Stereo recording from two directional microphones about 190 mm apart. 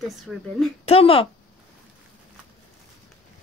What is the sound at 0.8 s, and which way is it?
Speech, 30° left (ahead or behind).